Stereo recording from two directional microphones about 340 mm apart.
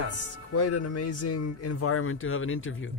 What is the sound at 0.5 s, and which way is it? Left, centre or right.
Speech, left.